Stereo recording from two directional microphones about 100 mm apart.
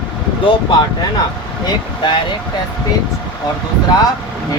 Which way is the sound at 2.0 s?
45° left (ahead or behind).